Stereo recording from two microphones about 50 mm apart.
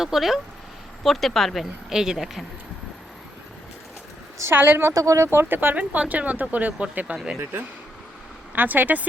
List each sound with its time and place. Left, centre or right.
0.0 s speech: centre
1.9 s speech: centre
4.5 s speech: right
5.3 s speech: right
5.5 s speech: right
8.5 s speech: right